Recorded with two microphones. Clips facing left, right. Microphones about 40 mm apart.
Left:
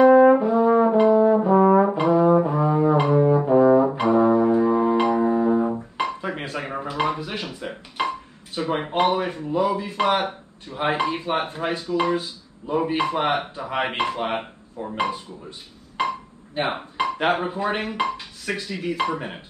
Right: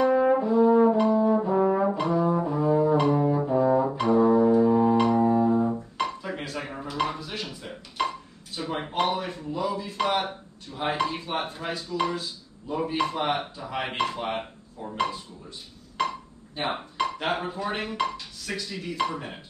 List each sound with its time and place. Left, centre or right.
0.3 s brass instrument: left
2.2 s music: left
4.9 s music: centre
5.2 s music: left
6.2 s dishes: left
6.9 s speech: centre
16.0 s music: left
17.2 s speech: left